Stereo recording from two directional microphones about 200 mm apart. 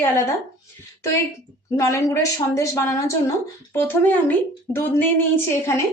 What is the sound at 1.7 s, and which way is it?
A woman's voice, 15° left (ahead or behind).